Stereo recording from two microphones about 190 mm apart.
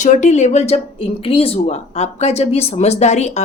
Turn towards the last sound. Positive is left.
turn(degrees=35)  # may be behind; listen again after turning